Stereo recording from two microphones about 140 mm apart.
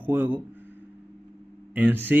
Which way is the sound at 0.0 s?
15° right (ahead or behind).